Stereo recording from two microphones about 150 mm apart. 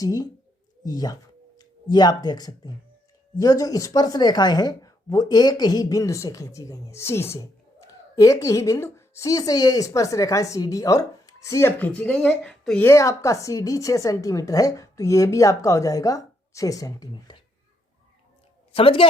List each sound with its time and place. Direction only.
0.0 s speech: 25° left (ahead or behind); by 12.9 s 5° left (ahead or behind)
12.9 s speech: 20° left (ahead or behind)
18.7 s a woman's voice: 40° left (ahead or behind)